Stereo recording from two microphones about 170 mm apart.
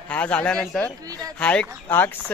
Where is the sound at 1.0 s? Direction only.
20° right (ahead or behind).